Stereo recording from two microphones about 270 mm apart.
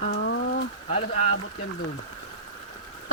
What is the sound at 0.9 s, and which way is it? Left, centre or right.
Speech, left.